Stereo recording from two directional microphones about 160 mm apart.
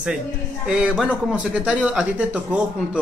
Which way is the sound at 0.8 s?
5° right (ahead or behind).